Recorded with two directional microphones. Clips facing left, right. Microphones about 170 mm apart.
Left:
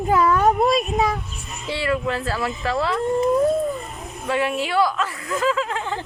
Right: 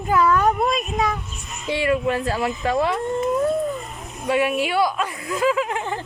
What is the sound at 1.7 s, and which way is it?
Speech, 20° right (ahead or behind).